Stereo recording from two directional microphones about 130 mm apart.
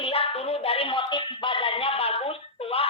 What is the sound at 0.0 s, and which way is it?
Music, 45° left (ahead or behind).